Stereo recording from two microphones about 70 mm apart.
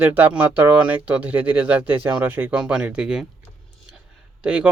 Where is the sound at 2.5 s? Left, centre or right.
Centre.